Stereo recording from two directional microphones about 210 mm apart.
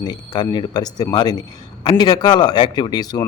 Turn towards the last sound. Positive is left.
turn(degrees=20)  # may be behind; listen again after turning